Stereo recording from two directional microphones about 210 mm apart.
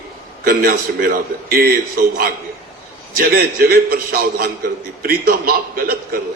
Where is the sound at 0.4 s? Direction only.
45° right (ahead or behind).